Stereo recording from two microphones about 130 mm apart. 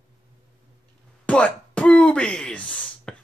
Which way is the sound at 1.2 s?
10° left (ahead or behind).